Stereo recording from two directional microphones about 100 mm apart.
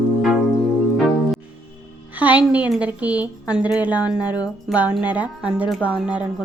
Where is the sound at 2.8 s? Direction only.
15° right (ahead or behind).